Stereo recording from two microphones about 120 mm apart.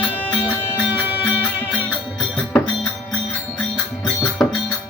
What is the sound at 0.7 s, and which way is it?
Music, 15° right (ahead or behind).